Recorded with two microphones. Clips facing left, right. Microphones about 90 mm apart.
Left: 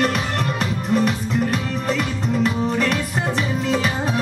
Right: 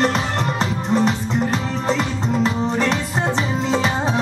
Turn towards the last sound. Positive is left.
turn(degrees=-30)  # may be behind; listen again after turning